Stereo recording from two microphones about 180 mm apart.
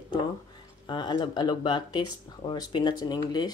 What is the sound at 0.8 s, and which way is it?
Speech, 25° left (ahead or behind).